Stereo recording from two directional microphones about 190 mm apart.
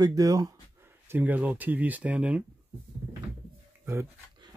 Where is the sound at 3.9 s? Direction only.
20° right (ahead or behind).